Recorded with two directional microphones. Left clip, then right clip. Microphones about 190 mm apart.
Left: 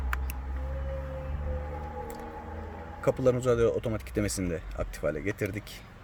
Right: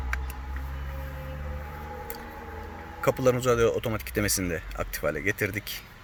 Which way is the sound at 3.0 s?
Centre (ahead or behind).